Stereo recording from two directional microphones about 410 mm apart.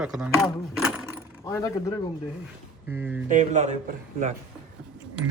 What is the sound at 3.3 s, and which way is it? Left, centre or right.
Speech, centre.